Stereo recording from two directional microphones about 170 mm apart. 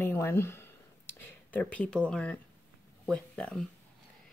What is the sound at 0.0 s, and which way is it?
Speech, 15° left (ahead or behind).